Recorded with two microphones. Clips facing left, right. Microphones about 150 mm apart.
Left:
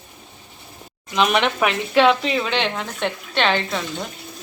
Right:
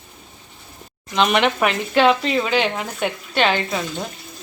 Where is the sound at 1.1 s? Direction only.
Centre (ahead or behind).